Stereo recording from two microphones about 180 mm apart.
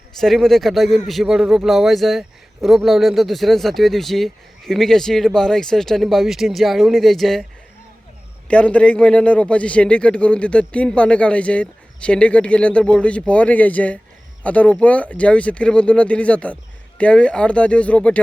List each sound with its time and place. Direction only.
0.2 s a man's voice: centre (ahead or behind)
8.4 s a man's voice: 5° left (ahead or behind)